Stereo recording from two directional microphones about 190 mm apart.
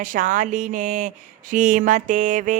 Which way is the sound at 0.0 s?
45° right (ahead or behind).